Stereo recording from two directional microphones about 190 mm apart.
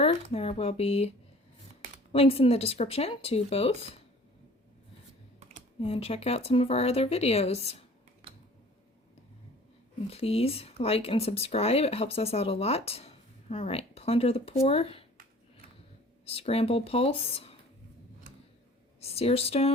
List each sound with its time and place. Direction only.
0.0 s speech: 30° left (ahead or behind)
2.1 s speech: 30° left (ahead or behind)
5.8 s speech: 30° left (ahead or behind)
10.1 s speech: 30° left (ahead or behind)
16.2 s speech: 30° left (ahead or behind)
18.9 s speech: 30° left (ahead or behind)